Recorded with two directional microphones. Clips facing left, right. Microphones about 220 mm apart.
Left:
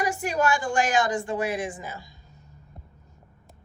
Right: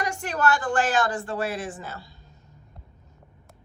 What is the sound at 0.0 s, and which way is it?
A woman's voice, 10° left (ahead or behind).